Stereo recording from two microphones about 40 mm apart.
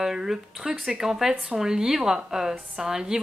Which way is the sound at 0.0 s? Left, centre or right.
Centre.